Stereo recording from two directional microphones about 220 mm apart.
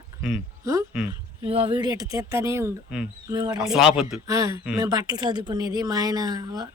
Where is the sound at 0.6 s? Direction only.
15° right (ahead or behind).